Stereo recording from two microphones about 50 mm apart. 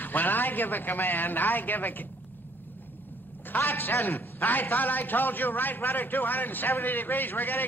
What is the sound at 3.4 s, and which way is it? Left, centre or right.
A man's voice, left.